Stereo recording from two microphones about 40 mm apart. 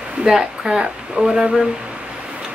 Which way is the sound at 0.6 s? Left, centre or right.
Right.